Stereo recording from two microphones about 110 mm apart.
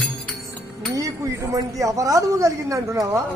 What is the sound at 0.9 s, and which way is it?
Speech, 30° right (ahead or behind).